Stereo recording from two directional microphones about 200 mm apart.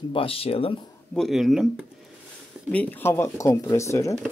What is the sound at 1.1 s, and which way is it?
Speech, centre (ahead or behind).